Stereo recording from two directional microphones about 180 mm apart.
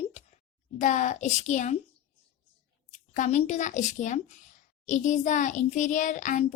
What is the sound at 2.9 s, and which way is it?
A child's voice, 45° left (ahead or behind).